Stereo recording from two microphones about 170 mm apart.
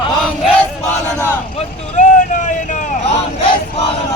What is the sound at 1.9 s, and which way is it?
Vehicle, 45° left (ahead or behind).